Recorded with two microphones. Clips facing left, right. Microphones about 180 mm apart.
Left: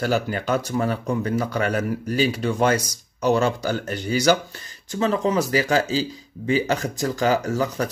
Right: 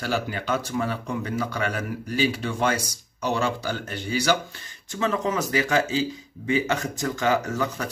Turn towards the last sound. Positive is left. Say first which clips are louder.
# left 4 dB
turn(degrees=35)  # may be behind; listen again after turning